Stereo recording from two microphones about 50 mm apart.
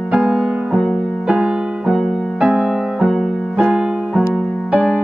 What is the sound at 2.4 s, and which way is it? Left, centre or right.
Music, centre.